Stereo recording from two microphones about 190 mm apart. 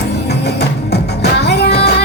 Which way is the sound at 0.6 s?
60° left (ahead or behind).